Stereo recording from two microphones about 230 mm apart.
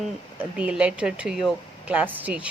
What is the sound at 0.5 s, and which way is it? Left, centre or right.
A man's voice, centre.